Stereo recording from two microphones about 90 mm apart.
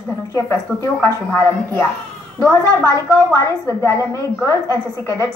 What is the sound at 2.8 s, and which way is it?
A woman's voice, 40° left (ahead or behind).